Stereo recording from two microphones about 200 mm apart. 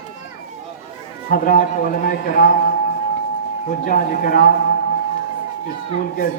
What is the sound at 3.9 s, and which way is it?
Speech, 45° left (ahead or behind).